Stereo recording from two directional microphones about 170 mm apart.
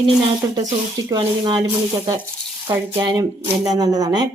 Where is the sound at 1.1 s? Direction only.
25° right (ahead or behind).